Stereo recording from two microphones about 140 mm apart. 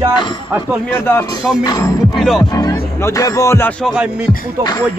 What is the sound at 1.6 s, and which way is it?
Music, 25° left (ahead or behind).